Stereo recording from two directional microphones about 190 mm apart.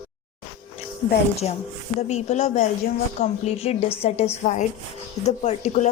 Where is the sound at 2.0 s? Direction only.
35° left (ahead or behind).